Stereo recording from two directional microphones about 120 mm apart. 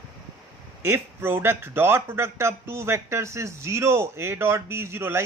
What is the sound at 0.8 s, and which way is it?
Speech, 20° right (ahead or behind).